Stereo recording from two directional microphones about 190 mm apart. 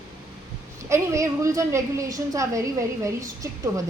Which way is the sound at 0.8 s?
15° right (ahead or behind).